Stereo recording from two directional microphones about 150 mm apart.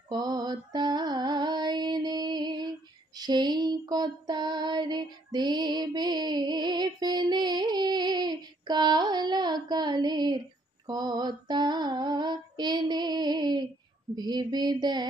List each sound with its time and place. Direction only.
0.1 s music: 25° right (ahead or behind)
3.2 s female singing: 30° right (ahead or behind)
14.1 s speech: 30° right (ahead or behind)